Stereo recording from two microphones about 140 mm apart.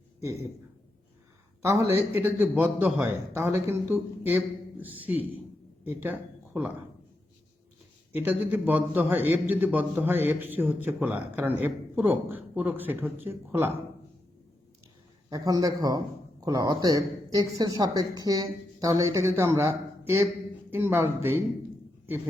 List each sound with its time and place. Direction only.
1.6 s speech: 20° right (ahead or behind)
8.1 s speech: 15° right (ahead or behind)
15.3 s speech: 25° right (ahead or behind)